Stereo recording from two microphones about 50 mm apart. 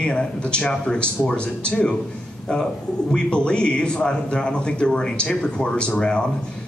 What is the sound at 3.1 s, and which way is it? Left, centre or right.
A man's voice, centre.